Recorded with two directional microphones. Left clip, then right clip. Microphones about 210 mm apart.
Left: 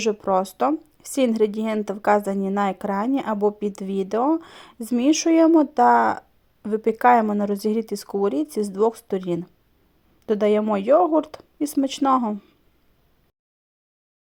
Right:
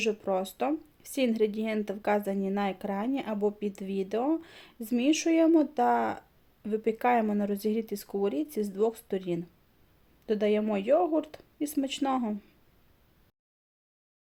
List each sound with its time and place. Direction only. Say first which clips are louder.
0.0 s speech: left 8 dB; 20° left (ahead or behind)